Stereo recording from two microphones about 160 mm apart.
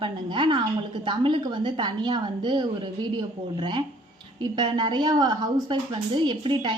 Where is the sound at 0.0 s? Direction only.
30° right (ahead or behind).